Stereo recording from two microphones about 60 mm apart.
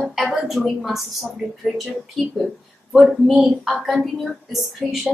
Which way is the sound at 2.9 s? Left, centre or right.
Centre.